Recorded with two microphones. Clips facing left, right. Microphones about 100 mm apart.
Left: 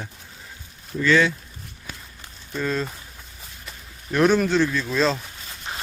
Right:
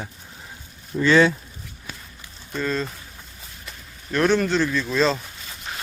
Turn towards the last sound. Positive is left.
turn(degrees=0)  # may be behind; listen again after turning